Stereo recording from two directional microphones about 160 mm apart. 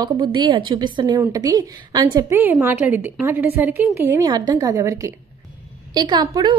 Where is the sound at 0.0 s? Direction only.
25° right (ahead or behind).